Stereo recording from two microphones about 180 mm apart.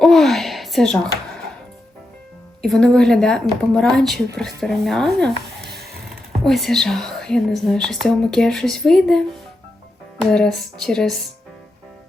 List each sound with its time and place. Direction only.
0.0 s speech: centre (ahead or behind)
2.6 s speech: centre (ahead or behind)
5.6 s a sound: 60° right (ahead or behind)
6.4 s speech: centre (ahead or behind)
10.2 s speech: 5° left (ahead or behind)